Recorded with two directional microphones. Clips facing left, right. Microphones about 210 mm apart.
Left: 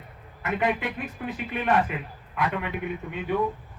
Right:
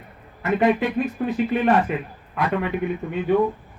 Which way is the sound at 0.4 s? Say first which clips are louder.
Right 7 dB; 35° right (ahead or behind).